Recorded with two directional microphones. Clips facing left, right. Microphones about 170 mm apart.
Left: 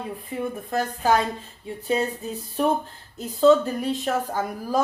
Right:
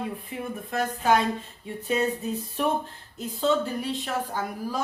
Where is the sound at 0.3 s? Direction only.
40° left (ahead or behind).